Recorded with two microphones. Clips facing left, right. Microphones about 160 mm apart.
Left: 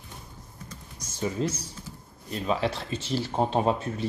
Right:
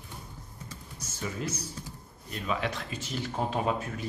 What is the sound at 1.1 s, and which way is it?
A man's voice, 30° left (ahead or behind).